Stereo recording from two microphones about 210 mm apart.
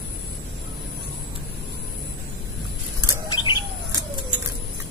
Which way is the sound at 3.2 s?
20° left (ahead or behind).